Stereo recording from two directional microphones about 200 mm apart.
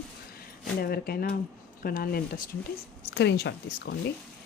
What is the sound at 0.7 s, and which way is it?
Speech, 50° left (ahead or behind).